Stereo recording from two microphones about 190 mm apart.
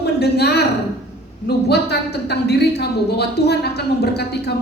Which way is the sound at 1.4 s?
60° left (ahead or behind).